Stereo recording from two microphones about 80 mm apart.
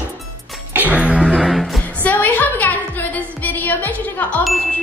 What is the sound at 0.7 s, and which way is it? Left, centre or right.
Music, centre.